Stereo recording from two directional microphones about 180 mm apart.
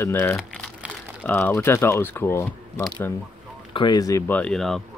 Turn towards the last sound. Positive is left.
turn(degrees=0)  # may be behind; listen again after turning